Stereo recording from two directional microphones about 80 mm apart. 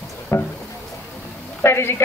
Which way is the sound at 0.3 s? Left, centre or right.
Left.